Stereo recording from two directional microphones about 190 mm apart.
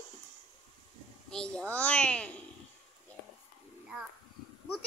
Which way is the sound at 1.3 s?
5° left (ahead or behind).